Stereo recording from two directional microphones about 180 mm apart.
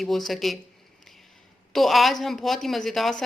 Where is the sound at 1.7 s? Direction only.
Centre (ahead or behind).